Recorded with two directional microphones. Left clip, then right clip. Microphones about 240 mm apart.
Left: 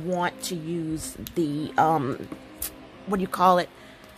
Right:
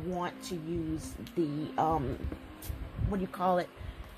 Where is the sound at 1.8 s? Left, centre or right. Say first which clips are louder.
Left 8 dB; left.